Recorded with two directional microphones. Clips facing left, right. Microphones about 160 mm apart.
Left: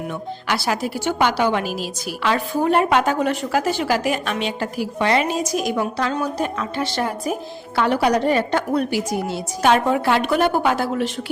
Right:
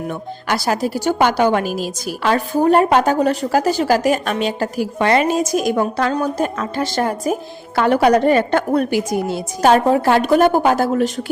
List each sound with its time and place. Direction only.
0.1 s a woman's voice: 45° right (ahead or behind)
9.3 s a woman's voice: 40° right (ahead or behind)